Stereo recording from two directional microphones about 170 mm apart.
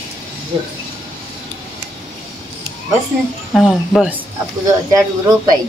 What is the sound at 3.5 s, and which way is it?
Speech, centre (ahead or behind).